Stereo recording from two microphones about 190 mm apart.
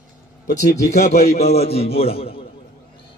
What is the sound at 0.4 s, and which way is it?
Speech, 55° left (ahead or behind).